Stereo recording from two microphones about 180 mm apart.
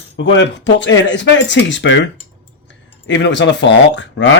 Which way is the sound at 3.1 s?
80° left.